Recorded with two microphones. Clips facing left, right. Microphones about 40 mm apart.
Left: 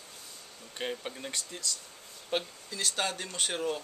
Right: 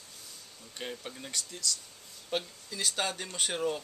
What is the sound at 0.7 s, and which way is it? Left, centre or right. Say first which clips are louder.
Speech: left 4 dB; centre.